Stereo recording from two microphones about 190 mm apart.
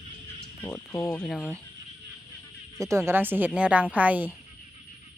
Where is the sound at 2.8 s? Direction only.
15° right (ahead or behind).